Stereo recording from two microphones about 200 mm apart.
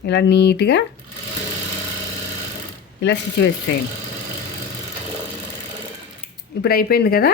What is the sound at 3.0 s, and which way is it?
Speech, 60° left (ahead or behind).